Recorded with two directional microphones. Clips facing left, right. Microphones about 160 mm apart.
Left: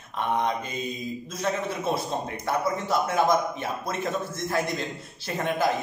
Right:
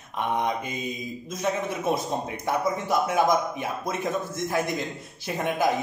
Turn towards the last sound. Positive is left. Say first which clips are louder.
# right 1 dB
turn(degrees=-15)  # may be behind; listen again after turning